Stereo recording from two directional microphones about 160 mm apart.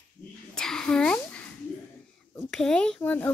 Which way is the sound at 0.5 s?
5° left (ahead or behind).